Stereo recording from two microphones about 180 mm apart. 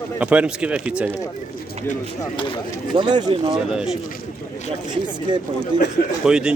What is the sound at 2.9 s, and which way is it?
Speech, 25° right (ahead or behind).